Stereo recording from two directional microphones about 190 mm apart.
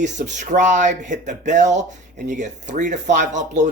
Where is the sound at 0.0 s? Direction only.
40° right (ahead or behind).